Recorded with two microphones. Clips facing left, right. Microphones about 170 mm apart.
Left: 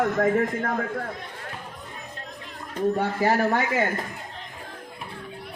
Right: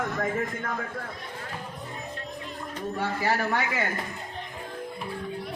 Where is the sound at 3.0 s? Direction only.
45° left (ahead or behind).